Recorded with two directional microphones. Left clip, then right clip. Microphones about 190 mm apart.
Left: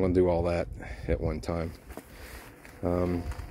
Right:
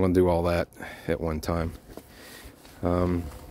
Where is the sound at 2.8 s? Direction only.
25° right (ahead or behind).